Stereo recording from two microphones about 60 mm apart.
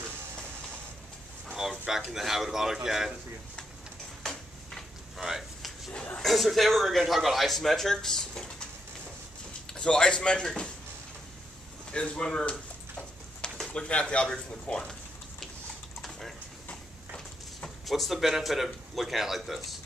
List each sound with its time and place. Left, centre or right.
1.6 s speech: centre
4.2 s a sound: centre
5.1 s a sound: centre
6.2 s speech: centre
9.7 s speech: centre
11.9 s a sound: centre
13.7 s speech: centre
16.0 s typing: centre
17.8 s speech: centre